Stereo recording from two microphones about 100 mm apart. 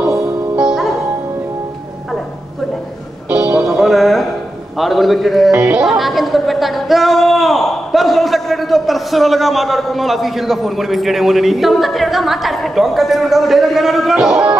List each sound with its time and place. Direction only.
0.6 s music: 5° right (ahead or behind)
3.3 s music: 15° right (ahead or behind)
3.5 s music: centre (ahead or behind)
4.7 s speech: centre (ahead or behind)